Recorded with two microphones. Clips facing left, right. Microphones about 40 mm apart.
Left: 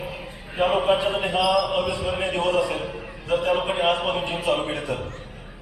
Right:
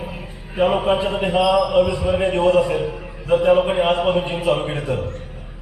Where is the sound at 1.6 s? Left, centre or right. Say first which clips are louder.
Right 8 dB; left.